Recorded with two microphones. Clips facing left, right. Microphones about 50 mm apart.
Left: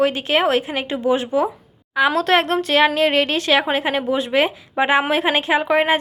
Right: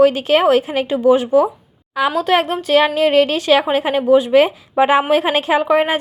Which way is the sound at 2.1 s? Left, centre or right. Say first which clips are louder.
Right 1 dB; left.